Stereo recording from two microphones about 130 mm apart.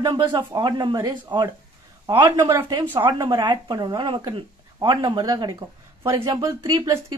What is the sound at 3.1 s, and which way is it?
A woman's voice, 35° right (ahead or behind).